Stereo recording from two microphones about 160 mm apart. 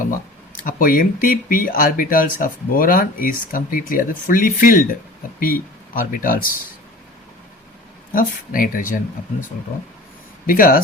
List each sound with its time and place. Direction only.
0.6 s speech: 60° left (ahead or behind)
8.1 s speech: 60° left (ahead or behind)
10.4 s speech: 65° left (ahead or behind)